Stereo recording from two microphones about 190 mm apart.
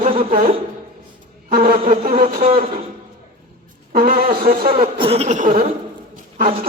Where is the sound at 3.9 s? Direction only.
50° right (ahead or behind).